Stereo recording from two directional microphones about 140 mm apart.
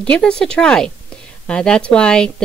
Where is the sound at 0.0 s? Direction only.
5° left (ahead or behind).